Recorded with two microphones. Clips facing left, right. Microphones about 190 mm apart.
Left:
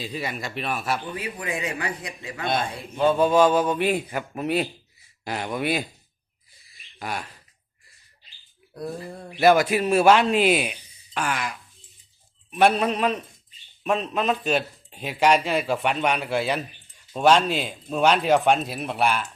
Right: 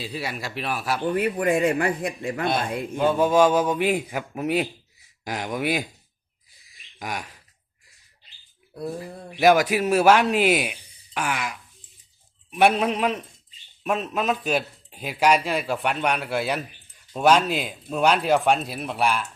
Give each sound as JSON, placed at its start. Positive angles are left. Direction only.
{"t": 0.0, "sound": "a man's voice", "side_deg": -5}
{"t": 1.1, "sound": "a man's voice", "side_deg": -55}
{"t": 3.0, "sound": "speech", "side_deg": -10}
{"t": 7.0, "sound": "speech", "side_deg": -10}
{"t": 8.7, "sound": "a sound", "side_deg": -5}
{"t": 9.4, "sound": "a man's voice", "side_deg": -10}